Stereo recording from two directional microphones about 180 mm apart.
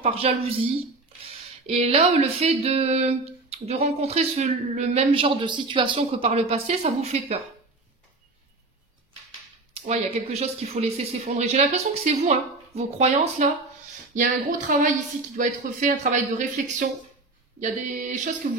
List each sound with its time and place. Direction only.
0.0 s speech: 35° right (ahead or behind)
9.8 s speech: 35° right (ahead or behind)